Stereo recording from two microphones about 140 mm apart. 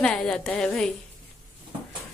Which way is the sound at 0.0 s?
5° left (ahead or behind).